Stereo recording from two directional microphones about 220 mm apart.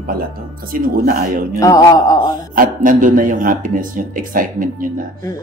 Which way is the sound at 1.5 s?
15° left (ahead or behind).